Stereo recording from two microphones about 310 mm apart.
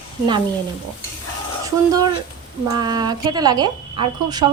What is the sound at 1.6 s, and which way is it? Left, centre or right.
A woman's voice, centre.